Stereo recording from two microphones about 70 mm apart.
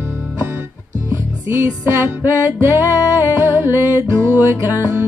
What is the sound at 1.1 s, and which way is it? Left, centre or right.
Music, right.